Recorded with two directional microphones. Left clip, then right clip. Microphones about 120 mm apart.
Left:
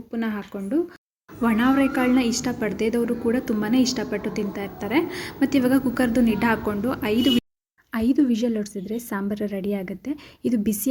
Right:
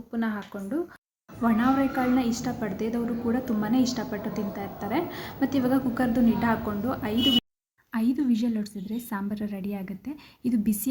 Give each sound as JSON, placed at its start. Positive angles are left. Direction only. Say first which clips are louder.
{"t": 0.1, "sound": "speech", "louder": "left 2 dB", "side_deg": 20}
{"t": 1.4, "sound": "a woman's voice", "louder": "left 4 dB", "side_deg": 20}